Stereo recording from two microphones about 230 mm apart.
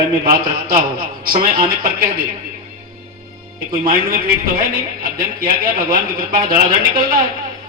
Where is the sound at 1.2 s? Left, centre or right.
Right.